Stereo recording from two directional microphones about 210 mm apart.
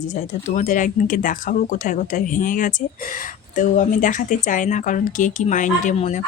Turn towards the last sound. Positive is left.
turn(degrees=35)  # may be behind; listen again after turning